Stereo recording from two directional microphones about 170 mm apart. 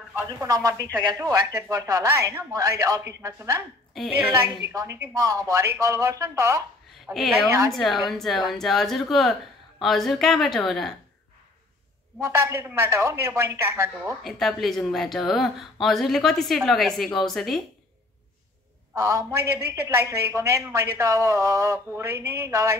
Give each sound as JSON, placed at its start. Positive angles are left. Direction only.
{"t": 0.1, "sound": "speech", "side_deg": -20}
{"t": 7.7, "sound": "speech", "side_deg": 0}
{"t": 12.2, "sound": "speech", "side_deg": -15}
{"t": 14.2, "sound": "speech", "side_deg": 0}
{"t": 18.9, "sound": "speech", "side_deg": -20}